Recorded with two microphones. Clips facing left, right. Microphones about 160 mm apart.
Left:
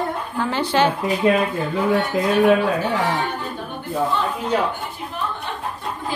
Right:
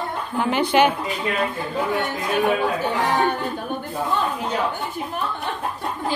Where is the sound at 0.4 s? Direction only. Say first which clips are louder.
Right 2 dB; 15° right (ahead or behind).